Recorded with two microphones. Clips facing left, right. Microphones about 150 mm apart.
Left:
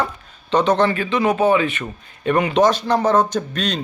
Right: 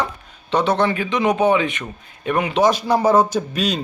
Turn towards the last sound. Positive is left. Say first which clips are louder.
# right 1 dB
turn(degrees=-10)  # may be behind; listen again after turning